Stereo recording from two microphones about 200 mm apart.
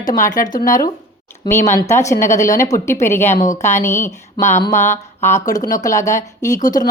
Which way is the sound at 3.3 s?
40° left (ahead or behind).